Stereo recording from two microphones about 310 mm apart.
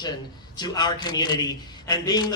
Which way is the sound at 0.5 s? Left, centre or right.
Centre.